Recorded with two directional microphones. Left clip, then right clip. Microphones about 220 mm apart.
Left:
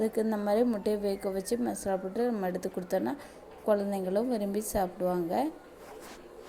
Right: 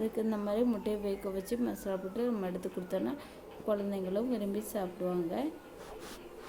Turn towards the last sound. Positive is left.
turn(degrees=25)  # may be behind; listen again after turning